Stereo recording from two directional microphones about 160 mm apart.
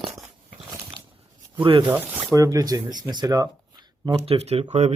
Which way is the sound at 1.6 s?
30° right (ahead or behind).